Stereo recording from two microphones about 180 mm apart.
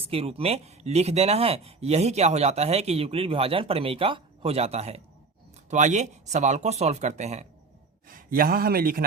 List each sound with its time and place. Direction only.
0.0 s speech: 30° right (ahead or behind)
8.0 s speech: 50° right (ahead or behind)